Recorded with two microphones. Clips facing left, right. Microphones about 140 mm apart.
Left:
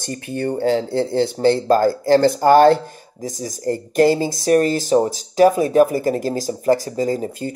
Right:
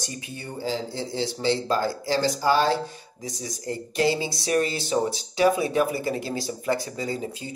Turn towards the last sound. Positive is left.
turn(degrees=45)  # may be behind; listen again after turning